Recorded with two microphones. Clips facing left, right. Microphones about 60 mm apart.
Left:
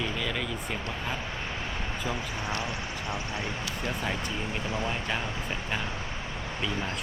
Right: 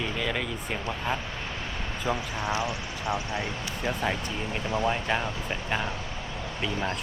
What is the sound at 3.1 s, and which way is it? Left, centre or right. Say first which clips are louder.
Speech: right 5 dB; right.